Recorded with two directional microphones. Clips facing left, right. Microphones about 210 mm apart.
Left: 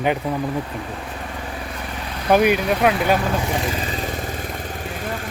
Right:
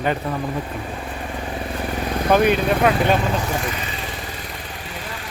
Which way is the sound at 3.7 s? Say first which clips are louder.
Left 4 dB; 35° left (ahead or behind).